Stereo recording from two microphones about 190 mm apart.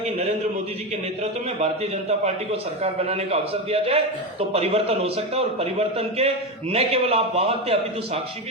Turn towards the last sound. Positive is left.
turn(degrees=-30)  # may be behind; listen again after turning